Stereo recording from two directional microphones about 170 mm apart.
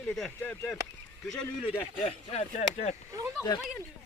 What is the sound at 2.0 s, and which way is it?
Speech, 40° left (ahead or behind).